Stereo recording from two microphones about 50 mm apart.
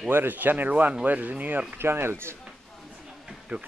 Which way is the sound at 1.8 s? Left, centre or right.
Right.